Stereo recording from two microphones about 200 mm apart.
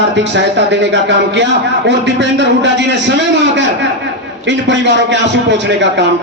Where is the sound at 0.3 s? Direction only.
60° right (ahead or behind).